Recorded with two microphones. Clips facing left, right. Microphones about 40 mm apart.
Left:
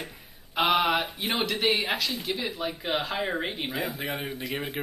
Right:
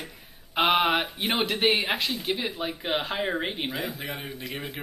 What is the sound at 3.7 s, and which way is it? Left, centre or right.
A man's voice, centre.